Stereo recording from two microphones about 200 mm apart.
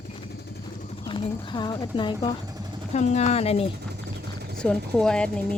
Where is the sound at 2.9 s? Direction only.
35° left (ahead or behind).